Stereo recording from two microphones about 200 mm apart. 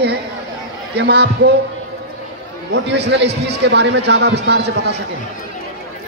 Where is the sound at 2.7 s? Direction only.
60° right (ahead or behind).